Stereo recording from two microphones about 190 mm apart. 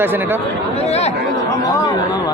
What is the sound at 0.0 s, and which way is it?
Speech, 10° right (ahead or behind).